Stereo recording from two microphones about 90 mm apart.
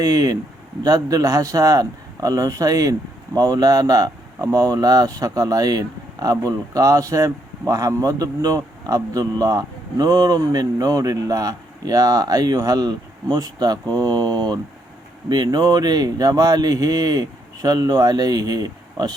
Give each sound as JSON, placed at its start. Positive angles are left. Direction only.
{"t": 0.0, "sound": "speech", "side_deg": -40}